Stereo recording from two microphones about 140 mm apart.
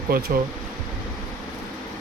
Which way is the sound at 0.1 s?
90° right.